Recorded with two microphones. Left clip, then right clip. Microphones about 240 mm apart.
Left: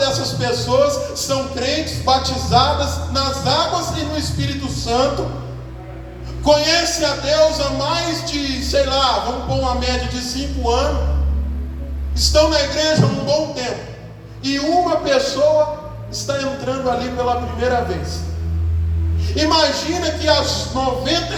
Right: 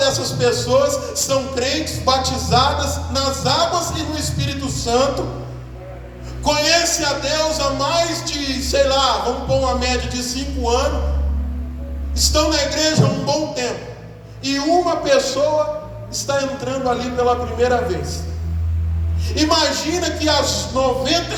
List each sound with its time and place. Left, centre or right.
0.0 s speech: right
6.4 s speech: right
12.1 s speech: right
19.3 s speech: right